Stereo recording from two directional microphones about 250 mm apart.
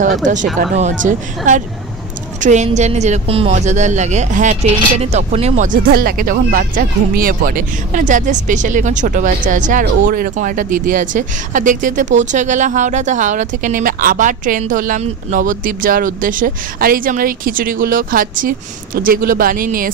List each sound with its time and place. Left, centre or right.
0.2 s a woman's voice: right